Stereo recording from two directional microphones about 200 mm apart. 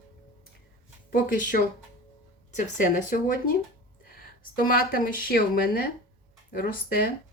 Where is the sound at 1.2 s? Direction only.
40° left (ahead or behind).